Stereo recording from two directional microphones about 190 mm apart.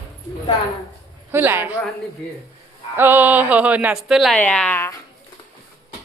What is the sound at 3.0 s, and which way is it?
A woman's voice, 10° right (ahead or behind).